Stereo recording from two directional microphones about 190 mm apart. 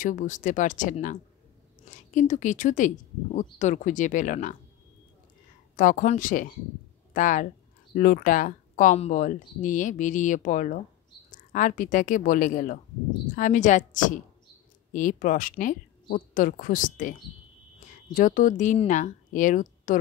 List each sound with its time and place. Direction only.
0.0 s speech: 40° left (ahead or behind)
5.8 s speech: 45° left (ahead or behind)